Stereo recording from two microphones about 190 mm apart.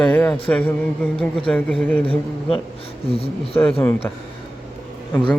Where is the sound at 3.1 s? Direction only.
30° left (ahead or behind).